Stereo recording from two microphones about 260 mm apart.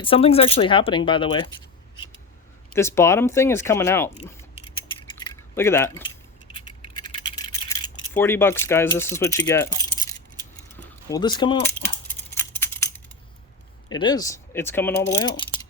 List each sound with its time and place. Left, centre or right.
0.0 s speech: left
2.7 s speech: centre
4.2 s a sound: centre
13.9 s speech: centre